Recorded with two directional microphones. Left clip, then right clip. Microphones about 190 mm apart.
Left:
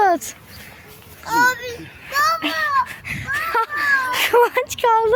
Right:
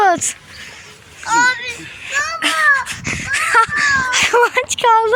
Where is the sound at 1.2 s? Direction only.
30° left (ahead or behind).